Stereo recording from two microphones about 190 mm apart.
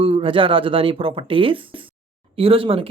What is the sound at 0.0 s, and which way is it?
Speech, 30° right (ahead or behind).